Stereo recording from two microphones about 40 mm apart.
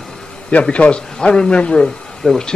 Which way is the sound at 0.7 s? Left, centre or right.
Left.